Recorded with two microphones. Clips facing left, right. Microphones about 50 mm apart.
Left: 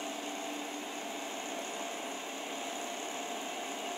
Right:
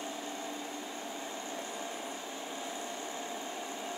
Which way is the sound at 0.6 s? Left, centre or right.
Left.